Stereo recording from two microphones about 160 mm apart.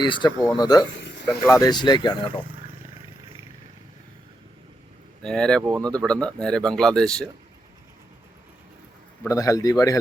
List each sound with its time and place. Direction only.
0.0 s speech: 30° left (ahead or behind)
2.5 s roaring cats: 35° right (ahead or behind)
5.2 s speech: 5° left (ahead or behind)
9.2 s speech: 20° left (ahead or behind)